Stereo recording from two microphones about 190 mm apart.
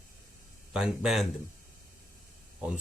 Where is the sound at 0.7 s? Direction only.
5° right (ahead or behind).